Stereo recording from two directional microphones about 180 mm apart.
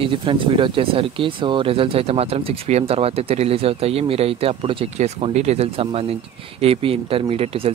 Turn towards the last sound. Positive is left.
turn(degrees=-30)  # may be behind; listen again after turning